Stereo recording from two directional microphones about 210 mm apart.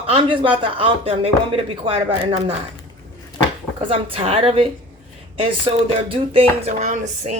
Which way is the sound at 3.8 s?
25° right (ahead or behind).